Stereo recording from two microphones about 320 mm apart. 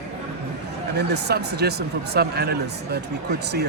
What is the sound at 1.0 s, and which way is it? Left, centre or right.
Speech, right.